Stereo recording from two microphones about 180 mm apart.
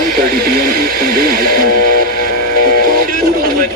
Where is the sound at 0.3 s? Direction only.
60° right (ahead or behind).